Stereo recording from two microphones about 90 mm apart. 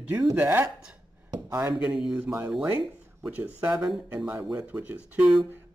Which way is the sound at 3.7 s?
5° right (ahead or behind).